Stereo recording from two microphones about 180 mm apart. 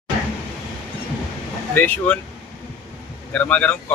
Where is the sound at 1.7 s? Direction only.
10° left (ahead or behind).